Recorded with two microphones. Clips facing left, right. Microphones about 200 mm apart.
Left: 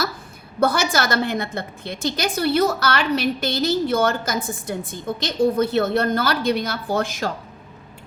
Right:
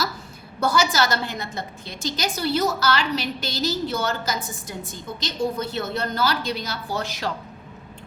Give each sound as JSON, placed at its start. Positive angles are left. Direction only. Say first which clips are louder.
{"t": 0.6, "sound": "a woman's voice", "louder": "left 2 dB", "side_deg": 55}